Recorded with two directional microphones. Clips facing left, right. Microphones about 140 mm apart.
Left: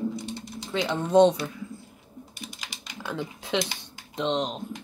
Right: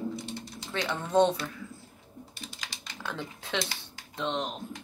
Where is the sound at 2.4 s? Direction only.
15° left (ahead or behind).